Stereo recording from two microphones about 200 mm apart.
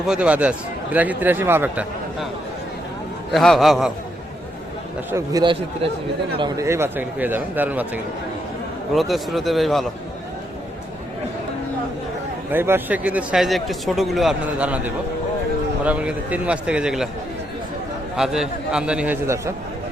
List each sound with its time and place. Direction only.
0.1 s a man's voice: 5° right (ahead or behind)
3.3 s a man's voice: centre (ahead or behind)
5.1 s a man's voice: 20° right (ahead or behind)
9.0 s a man's voice: centre (ahead or behind)
12.5 s a man's voice: 10° right (ahead or behind)
18.2 s a man's voice: 5° right (ahead or behind)